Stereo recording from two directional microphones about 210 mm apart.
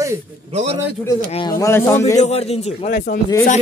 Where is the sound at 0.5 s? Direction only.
30° right (ahead or behind).